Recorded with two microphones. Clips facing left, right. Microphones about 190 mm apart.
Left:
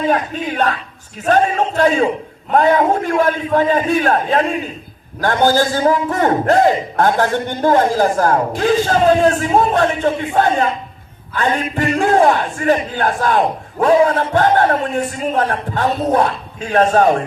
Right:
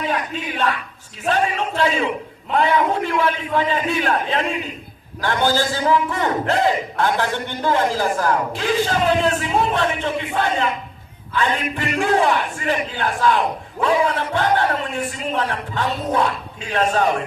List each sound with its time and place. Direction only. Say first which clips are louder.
1.3 s a man's voice: left 6 dB; 50° left (ahead or behind)